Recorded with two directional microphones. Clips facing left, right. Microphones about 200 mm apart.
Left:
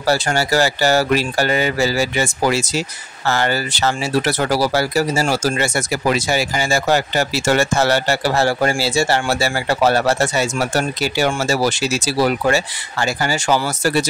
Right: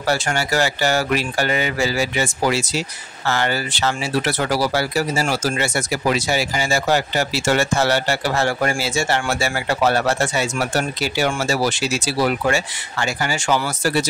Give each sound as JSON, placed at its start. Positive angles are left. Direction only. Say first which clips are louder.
{"t": 0.0, "sound": "speech", "louder": "left 3 dB", "side_deg": 35}